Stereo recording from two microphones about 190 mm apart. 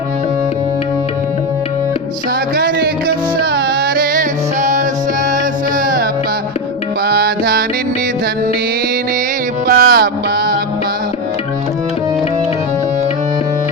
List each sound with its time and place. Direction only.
2.6 s music: 55° right (ahead or behind)
9.6 s music: 50° right (ahead or behind)